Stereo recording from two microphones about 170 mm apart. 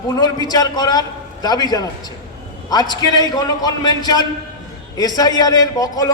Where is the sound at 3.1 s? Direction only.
25° left (ahead or behind).